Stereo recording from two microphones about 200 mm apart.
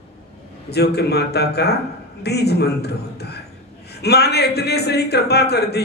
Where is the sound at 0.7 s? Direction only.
55° left (ahead or behind).